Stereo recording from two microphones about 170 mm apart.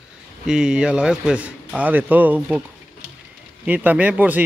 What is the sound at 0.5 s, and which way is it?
A man's voice, 5° right (ahead or behind).